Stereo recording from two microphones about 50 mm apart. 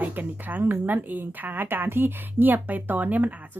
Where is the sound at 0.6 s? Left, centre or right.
Right.